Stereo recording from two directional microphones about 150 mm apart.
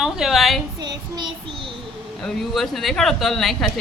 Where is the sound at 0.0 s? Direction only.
Centre (ahead or behind).